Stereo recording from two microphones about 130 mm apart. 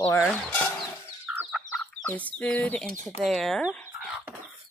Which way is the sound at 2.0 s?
10° left (ahead or behind).